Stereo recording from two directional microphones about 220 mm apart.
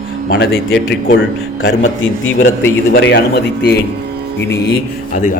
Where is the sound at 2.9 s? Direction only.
50° left (ahead or behind).